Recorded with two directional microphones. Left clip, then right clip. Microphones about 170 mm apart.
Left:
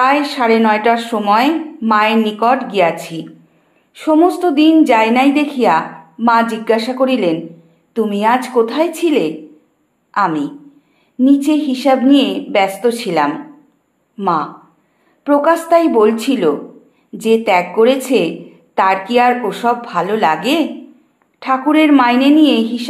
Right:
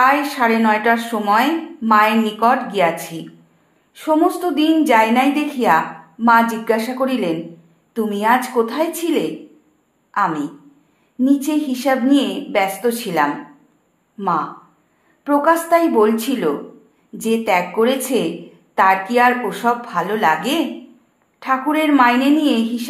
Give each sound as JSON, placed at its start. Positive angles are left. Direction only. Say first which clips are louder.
{"t": 0.0, "sound": "a woman's voice", "louder": "left 2 dB", "side_deg": 35}
{"t": 3.9, "sound": "a woman's voice", "louder": "left 4 dB", "side_deg": 35}
{"t": 21.4, "sound": "a woman's voice", "louder": "left 5 dB", "side_deg": 35}